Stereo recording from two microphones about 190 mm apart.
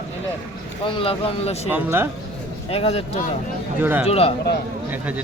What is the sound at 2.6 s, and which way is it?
Speech, 30° left (ahead or behind).